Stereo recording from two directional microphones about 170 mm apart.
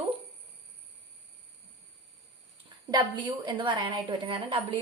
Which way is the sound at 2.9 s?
25° right (ahead or behind).